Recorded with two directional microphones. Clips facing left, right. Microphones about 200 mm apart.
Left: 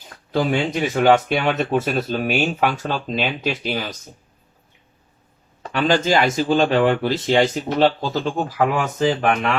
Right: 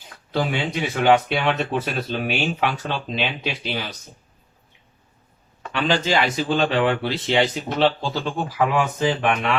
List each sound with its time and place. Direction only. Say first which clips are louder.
0.3 s speech: left 4 dB; 45° left (ahead or behind)
5.6 s speech: left 3 dB; 45° left (ahead or behind)